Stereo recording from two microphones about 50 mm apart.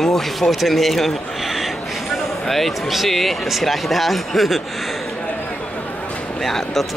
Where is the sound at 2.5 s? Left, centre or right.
Centre.